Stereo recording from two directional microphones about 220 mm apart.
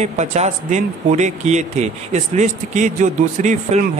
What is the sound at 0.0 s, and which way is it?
Speech, 30° right (ahead or behind).